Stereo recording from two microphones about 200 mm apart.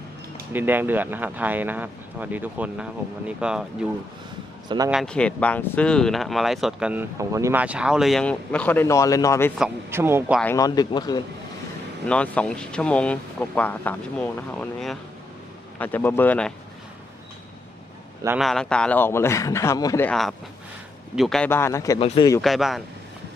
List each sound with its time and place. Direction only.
0.5 s speech: 10° right (ahead or behind)
4.9 s speech: centre (ahead or behind)
9.6 s speech: 5° right (ahead or behind)
10.4 s a man's voice: 15° left (ahead or behind)
12.0 s a man's voice: 5° left (ahead or behind)
18.3 s a man's voice: centre (ahead or behind); by 20.1 s 15° left (ahead or behind)
20.1 s a man's voice: centre (ahead or behind)
21.9 s a man's voice: 30° left (ahead or behind)
22.4 s speech: centre (ahead or behind)